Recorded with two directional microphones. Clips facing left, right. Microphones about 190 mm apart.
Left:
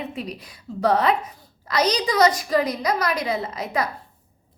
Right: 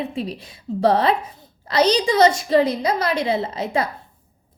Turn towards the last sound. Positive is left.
turn(degrees=-30)  # may be behind; listen again after turning